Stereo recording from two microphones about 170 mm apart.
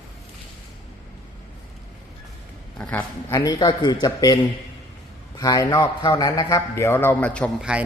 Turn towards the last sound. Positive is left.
turn(degrees=5)  # may be behind; listen again after turning